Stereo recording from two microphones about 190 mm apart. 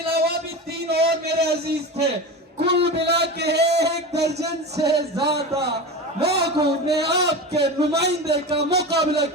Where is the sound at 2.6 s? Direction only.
60° right (ahead or behind).